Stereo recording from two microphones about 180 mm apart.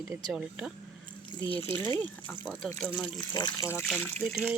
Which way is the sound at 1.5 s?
30° left (ahead or behind).